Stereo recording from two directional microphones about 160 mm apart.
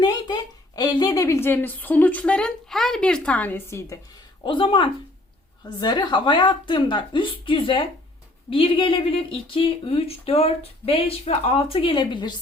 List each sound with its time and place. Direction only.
0.0 s a woman's voice: 25° left (ahead or behind)
4.4 s speech: 30° left (ahead or behind)